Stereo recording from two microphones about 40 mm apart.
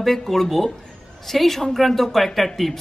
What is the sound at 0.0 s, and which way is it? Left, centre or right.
A man's voice, centre.